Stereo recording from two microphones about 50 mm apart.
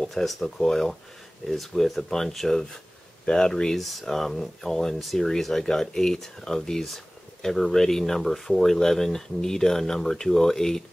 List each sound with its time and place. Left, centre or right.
0.1 s speech: centre
3.7 s speech: centre